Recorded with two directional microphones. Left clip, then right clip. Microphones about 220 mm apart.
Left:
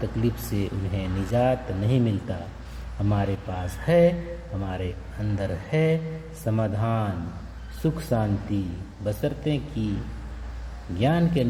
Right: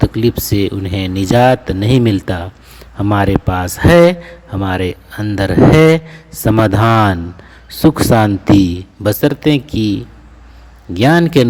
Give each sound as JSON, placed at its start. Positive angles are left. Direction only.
{"t": 0.2, "sound": "speech", "side_deg": -40}
{"t": 7.8, "sound": "speech", "side_deg": -45}
{"t": 10.9, "sound": "speech", "side_deg": -50}